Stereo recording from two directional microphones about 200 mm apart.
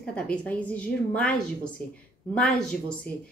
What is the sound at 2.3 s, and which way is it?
Speech, 5° left (ahead or behind).